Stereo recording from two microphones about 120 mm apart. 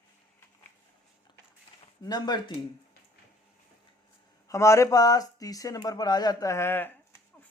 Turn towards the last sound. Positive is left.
turn(degrees=20)  # may be behind; listen again after turning